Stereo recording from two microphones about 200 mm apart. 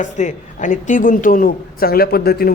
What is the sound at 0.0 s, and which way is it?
Speech, 40° left (ahead or behind).